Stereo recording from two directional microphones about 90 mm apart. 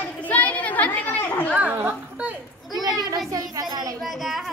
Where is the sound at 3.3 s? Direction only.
45° right (ahead or behind).